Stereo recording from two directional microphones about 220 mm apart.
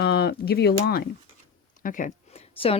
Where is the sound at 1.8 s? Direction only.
35° left (ahead or behind).